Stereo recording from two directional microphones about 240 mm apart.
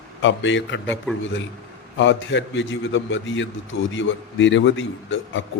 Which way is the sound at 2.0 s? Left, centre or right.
Left.